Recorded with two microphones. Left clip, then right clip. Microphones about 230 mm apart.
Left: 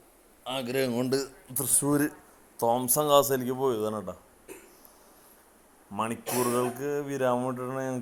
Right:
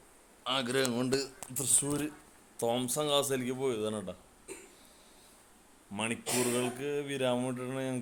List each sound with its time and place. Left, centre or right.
0.4 s speech: centre
2.6 s speech: centre
3.0 s speech: centre
5.9 s speech: centre